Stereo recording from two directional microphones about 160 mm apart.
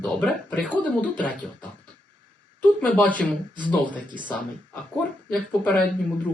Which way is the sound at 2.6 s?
10° left (ahead or behind).